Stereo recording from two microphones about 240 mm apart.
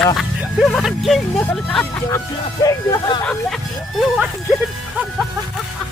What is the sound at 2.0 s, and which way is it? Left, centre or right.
Speech, centre.